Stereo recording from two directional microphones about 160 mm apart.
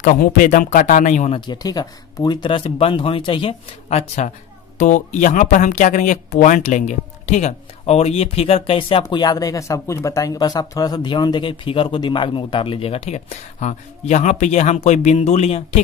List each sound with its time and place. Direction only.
0.0 s speech: 60° left (ahead or behind)
1.4 s speech: 25° left (ahead or behind)
4.7 s speech: 50° left (ahead or behind)